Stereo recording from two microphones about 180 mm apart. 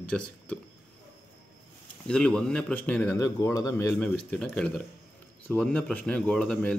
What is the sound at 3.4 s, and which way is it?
Speech, 20° left (ahead or behind).